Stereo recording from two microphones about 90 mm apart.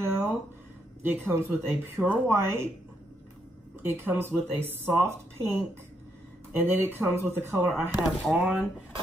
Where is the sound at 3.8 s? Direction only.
25° right (ahead or behind).